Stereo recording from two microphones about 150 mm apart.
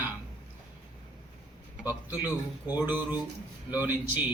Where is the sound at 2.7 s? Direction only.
10° right (ahead or behind).